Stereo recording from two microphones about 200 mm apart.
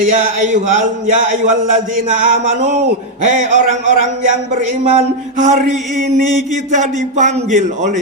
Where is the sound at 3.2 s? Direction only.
40° right (ahead or behind).